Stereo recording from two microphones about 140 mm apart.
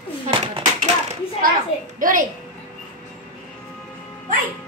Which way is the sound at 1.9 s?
75° right (ahead or behind).